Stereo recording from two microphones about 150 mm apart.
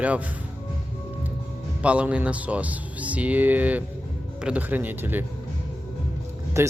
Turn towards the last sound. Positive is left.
turn(degrees=-20)  # may be behind; listen again after turning